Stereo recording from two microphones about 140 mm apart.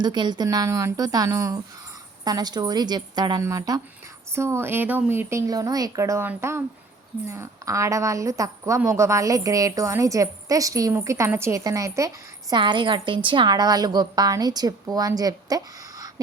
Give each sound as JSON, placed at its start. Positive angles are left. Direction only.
{"t": 0.0, "sound": "a woman's voice", "side_deg": -30}